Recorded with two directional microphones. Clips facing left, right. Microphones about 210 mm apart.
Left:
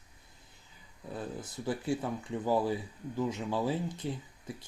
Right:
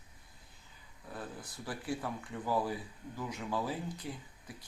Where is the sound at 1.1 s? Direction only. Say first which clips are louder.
Left 5 dB; 25° left (ahead or behind).